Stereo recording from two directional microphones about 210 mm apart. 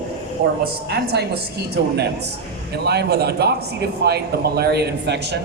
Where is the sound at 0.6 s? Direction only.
50° right (ahead or behind).